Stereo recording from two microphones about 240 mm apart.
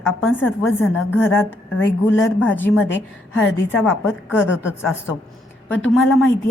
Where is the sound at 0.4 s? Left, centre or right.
Centre.